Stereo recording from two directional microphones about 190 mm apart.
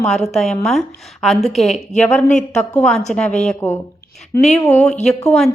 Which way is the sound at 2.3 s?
40° left (ahead or behind).